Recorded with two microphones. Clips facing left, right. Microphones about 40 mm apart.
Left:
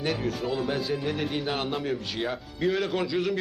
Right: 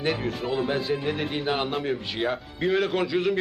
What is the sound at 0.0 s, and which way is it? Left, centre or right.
A man's voice, centre.